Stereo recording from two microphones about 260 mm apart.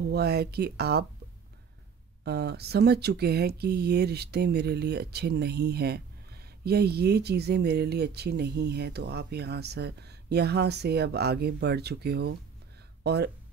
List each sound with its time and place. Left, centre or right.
0.1 s speech: right
2.2 s speech: right